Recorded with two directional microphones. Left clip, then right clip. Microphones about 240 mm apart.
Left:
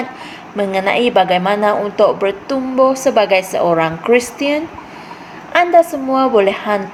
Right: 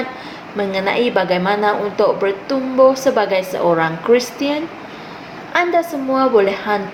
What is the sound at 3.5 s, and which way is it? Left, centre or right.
A woman's voice, left.